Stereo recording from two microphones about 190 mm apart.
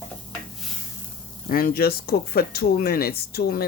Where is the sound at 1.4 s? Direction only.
50° left (ahead or behind).